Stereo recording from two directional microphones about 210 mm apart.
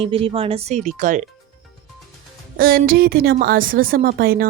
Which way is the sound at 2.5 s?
45° right (ahead or behind).